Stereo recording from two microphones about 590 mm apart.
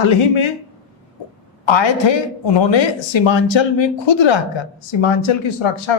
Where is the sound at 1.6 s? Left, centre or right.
Left.